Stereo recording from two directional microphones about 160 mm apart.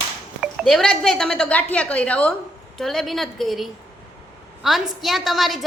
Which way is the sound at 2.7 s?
Centre (ahead or behind).